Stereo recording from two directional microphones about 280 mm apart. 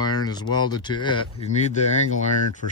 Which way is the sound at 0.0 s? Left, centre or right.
Centre.